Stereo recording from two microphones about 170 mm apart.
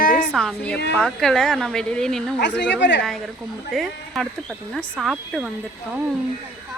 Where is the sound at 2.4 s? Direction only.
90° left.